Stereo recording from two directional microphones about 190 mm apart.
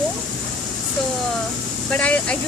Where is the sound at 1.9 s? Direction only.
5° left (ahead or behind).